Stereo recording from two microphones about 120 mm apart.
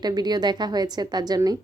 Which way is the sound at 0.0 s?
35° right (ahead or behind).